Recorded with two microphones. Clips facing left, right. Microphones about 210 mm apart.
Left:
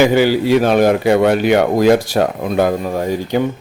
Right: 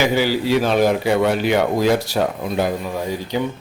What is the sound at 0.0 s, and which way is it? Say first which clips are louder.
A man's voice: left 6 dB; 55° left (ahead or behind).